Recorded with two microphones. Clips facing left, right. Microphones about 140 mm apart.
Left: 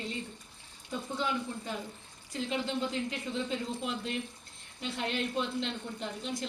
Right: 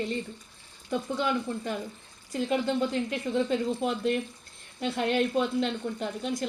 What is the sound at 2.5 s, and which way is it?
Speech, 50° right (ahead or behind).